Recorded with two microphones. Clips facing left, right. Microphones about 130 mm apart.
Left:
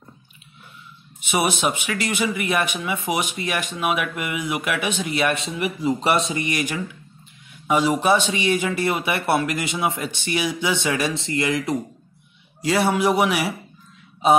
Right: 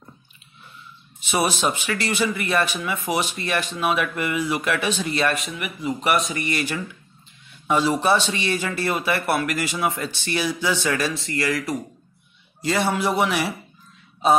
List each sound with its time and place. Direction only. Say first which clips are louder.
1.3 s speech: left 1 dB; 15° left (ahead or behind)
5.3 s speech: left 4 dB; 25° left (ahead or behind)
12.6 s speech: left 3 dB; 10° left (ahead or behind)